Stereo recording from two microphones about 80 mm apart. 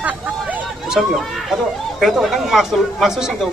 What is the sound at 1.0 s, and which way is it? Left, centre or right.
Speech, centre.